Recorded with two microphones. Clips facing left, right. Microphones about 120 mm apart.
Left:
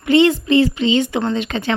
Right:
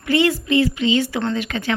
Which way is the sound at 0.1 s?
25° left (ahead or behind).